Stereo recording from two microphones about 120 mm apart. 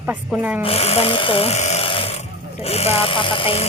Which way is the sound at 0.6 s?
55° left (ahead or behind).